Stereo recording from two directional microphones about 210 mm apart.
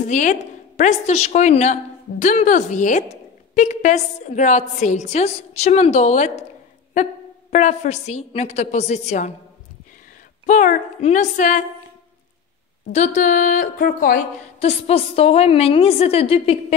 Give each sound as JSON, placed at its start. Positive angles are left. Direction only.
{"t": 0.1, "sound": "a woman's voice", "side_deg": 35}
{"t": 7.5, "sound": "a woman's voice", "side_deg": 35}
{"t": 10.4, "sound": "a woman's voice", "side_deg": 35}
{"t": 12.9, "sound": "a woman's voice", "side_deg": 35}